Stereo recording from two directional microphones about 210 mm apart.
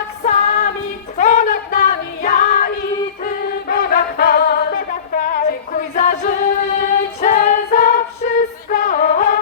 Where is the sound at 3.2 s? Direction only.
45° left (ahead or behind).